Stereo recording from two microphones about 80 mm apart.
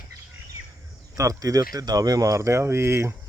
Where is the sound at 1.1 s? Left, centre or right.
Right.